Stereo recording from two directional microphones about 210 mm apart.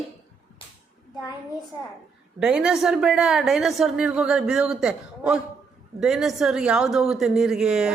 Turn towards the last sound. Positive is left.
turn(degrees=-5)  # may be behind; listen again after turning